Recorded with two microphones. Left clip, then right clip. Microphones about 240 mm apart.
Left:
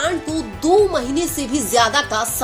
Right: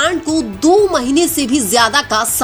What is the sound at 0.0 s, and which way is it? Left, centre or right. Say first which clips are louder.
Speech: right 6 dB; right.